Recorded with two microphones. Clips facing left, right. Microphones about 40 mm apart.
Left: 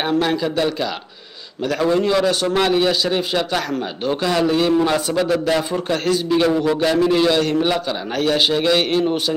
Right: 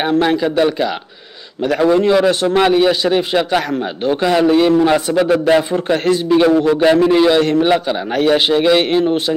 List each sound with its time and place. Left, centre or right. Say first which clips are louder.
0.2 s a man's voice: right 5 dB; centre